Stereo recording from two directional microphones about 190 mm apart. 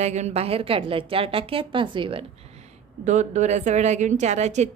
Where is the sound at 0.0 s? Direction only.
35° right (ahead or behind).